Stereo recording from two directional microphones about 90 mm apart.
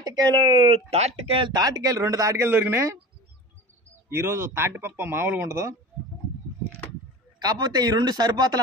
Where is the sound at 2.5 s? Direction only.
25° right (ahead or behind).